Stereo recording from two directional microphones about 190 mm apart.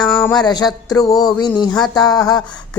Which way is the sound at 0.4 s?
20° left (ahead or behind).